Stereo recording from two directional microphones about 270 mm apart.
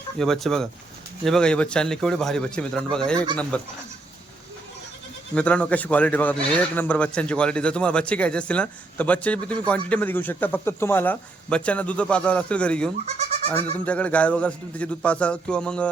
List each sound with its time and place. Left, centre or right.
0.2 s speech: centre
5.3 s speech: centre
13.1 s goat: right
13.7 s speech: centre